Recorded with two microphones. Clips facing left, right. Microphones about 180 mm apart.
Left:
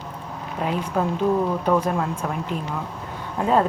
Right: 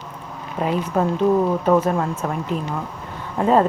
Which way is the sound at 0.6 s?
5° right (ahead or behind).